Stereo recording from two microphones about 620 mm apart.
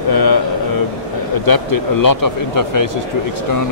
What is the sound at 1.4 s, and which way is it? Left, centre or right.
Speech, left.